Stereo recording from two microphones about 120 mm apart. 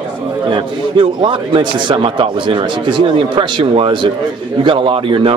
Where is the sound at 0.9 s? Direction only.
40° right (ahead or behind).